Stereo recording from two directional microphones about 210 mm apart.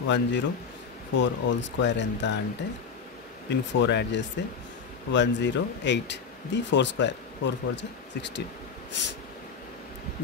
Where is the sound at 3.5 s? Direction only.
55° left (ahead or behind).